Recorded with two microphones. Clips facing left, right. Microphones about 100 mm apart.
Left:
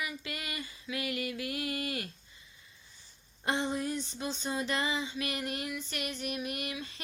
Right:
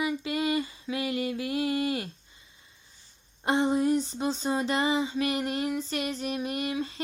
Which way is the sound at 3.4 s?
30° right (ahead or behind).